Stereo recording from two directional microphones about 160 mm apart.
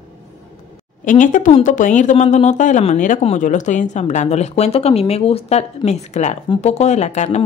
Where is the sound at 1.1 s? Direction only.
55° left (ahead or behind).